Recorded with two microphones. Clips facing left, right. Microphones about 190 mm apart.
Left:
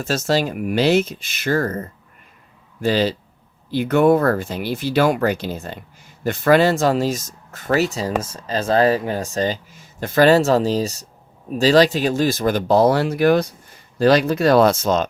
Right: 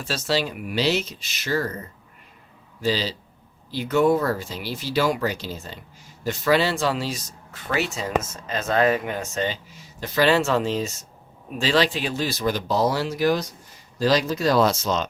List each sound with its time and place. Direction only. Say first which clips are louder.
0.0 s speech: left 5 dB; 45° left (ahead or behind)